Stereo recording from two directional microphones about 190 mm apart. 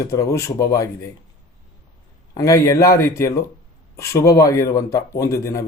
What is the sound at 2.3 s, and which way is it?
Speech, 15° left (ahead or behind).